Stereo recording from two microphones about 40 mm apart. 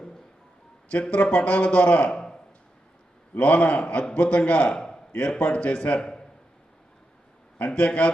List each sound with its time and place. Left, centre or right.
1.1 s a man's voice: left
3.3 s a man's voice: left
7.7 s a man's voice: left